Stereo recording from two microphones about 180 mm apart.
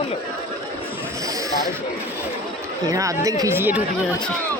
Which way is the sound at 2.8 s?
20° right (ahead or behind).